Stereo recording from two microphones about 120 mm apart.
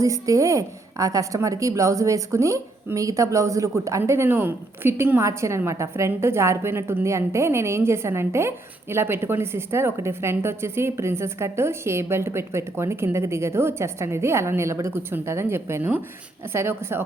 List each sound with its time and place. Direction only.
0.0 s a woman's voice: 25° right (ahead or behind)